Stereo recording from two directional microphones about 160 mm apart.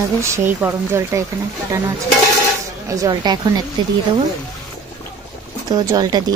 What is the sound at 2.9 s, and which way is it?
Speech, 25° right (ahead or behind).